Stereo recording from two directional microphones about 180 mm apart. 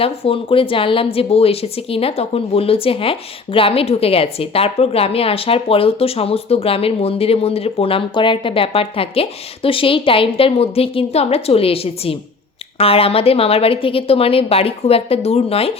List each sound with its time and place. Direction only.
0.0 s speech: 30° left (ahead or behind)